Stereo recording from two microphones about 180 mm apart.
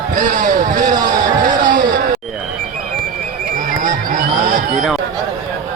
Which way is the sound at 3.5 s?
45° right (ahead or behind).